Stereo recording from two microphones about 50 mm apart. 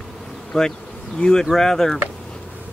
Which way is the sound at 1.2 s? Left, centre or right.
Centre.